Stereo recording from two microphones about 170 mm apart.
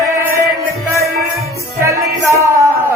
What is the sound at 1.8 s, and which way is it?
Music, 15° right (ahead or behind).